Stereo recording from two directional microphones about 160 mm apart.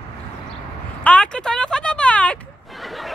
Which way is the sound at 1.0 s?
5° left (ahead or behind).